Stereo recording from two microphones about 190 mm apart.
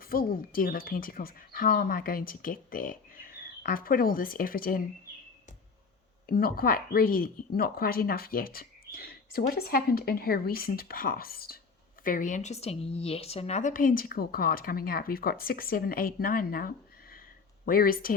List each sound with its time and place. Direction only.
0.0 s speech: 50° left (ahead or behind)
6.2 s speech: 50° left (ahead or behind)